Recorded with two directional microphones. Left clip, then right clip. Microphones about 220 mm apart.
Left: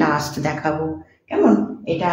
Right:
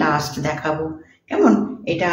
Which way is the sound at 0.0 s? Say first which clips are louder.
Even; 15° left (ahead or behind).